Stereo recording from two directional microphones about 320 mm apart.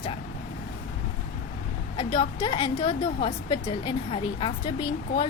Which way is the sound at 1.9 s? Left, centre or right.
Centre.